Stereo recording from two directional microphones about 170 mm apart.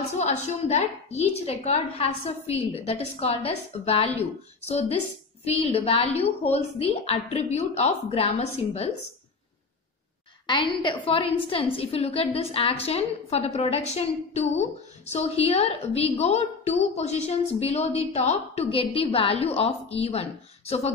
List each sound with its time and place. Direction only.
0.2 s a woman's voice: 40° left (ahead or behind)
10.4 s a woman's voice: 30° left (ahead or behind)